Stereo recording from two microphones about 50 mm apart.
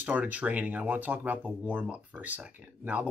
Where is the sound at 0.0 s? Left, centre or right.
Right.